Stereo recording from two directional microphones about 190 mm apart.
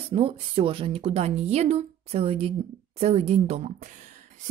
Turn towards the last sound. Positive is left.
turn(degrees=-40)  # may be behind; listen again after turning